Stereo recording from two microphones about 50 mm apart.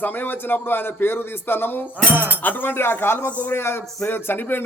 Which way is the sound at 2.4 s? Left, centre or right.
Left.